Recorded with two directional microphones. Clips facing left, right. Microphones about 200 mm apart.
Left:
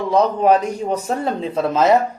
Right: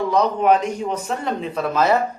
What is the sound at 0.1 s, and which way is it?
A man's voice, 30° left (ahead or behind).